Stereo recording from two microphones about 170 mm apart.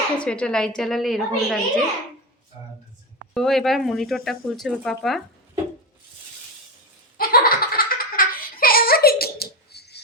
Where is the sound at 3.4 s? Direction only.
Centre (ahead or behind).